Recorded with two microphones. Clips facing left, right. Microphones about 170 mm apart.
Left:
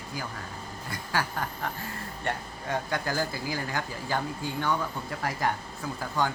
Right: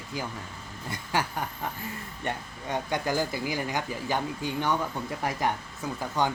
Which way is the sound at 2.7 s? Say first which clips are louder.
Right 2 dB; 20° right (ahead or behind).